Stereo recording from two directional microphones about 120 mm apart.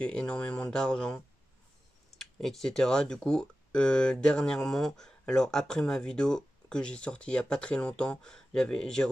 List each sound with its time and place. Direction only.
0.0 s speech: 10° left (ahead or behind)